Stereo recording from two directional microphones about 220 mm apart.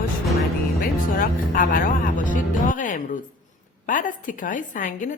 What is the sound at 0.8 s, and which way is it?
A woman's voice, 40° left (ahead or behind).